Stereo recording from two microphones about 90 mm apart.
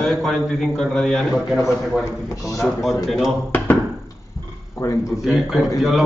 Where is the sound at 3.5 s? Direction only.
20° left (ahead or behind).